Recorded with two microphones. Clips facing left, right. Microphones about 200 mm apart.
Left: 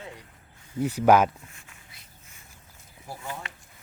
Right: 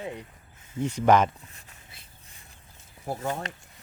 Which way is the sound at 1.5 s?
35° right (ahead or behind).